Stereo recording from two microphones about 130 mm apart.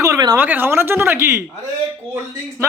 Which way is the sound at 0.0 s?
25° right (ahead or behind).